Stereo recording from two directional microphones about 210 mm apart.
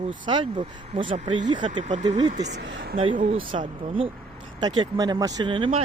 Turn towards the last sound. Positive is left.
turn(degrees=-25)  # may be behind; listen again after turning